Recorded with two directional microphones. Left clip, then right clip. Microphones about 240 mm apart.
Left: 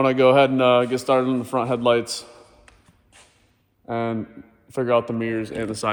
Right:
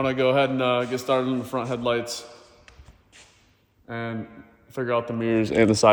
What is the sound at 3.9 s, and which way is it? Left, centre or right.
Speech, centre.